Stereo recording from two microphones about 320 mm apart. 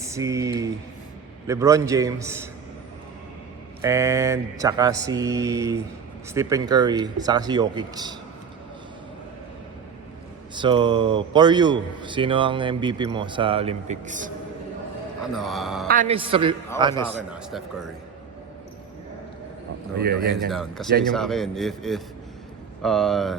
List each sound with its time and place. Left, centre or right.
0.0 s speech: centre
3.8 s speech: centre
10.5 s speech: centre
15.2 s a man's voice: centre
15.9 s speech: right
20.0 s a man's voice: right
20.5 s a man's voice: centre